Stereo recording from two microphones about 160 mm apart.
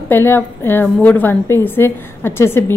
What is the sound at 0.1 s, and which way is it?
A woman's voice, 15° left (ahead or behind).